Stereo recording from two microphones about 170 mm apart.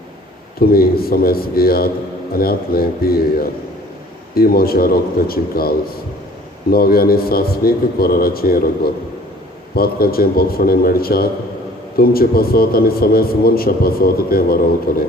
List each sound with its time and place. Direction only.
0.6 s a man's voice: 60° left (ahead or behind)